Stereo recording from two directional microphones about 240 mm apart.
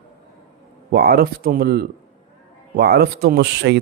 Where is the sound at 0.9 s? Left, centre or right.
Right.